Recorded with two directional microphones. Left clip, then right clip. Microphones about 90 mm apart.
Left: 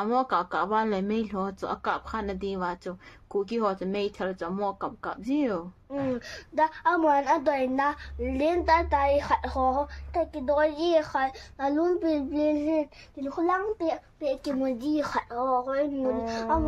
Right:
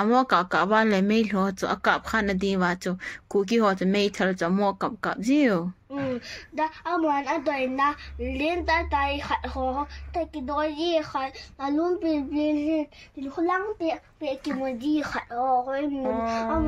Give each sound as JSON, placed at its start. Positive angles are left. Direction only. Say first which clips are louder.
{"t": 0.0, "sound": "speech", "louder": "right 4 dB", "side_deg": -25}
{"t": 6.5, "sound": "a woman's voice", "louder": "left 3 dB", "side_deg": 25}
{"t": 13.8, "sound": "a child's voice", "louder": "even", "side_deg": 15}
{"t": 16.0, "sound": "speech", "louder": "right 1 dB", "side_deg": -15}